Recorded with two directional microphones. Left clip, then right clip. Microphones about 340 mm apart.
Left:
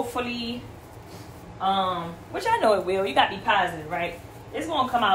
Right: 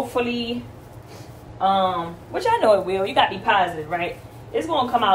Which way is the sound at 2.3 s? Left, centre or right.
Centre.